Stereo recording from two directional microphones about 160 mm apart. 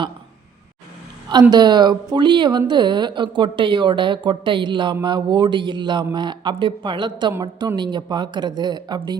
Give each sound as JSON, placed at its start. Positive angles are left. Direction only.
{"t": 1.3, "sound": "a woman's voice", "side_deg": -25}